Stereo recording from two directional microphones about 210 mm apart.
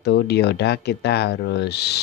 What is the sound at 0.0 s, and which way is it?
Speech, 55° left (ahead or behind).